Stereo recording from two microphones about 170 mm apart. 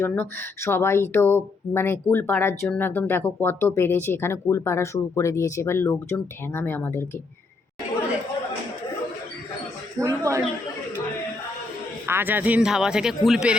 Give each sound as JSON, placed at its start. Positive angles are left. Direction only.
{"t": 0.0, "sound": "speech", "side_deg": 10}
{"t": 10.0, "sound": "a woman's voice", "side_deg": -20}
{"t": 12.0, "sound": "speech", "side_deg": -10}